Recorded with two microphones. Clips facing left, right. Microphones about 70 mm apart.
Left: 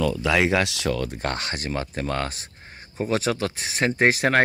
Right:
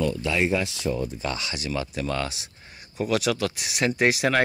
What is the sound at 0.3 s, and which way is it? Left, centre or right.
Speech, left.